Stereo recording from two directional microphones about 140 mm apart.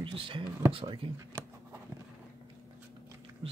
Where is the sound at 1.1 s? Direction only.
20° right (ahead or behind).